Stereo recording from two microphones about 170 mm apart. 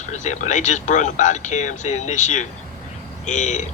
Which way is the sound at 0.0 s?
45° left (ahead or behind).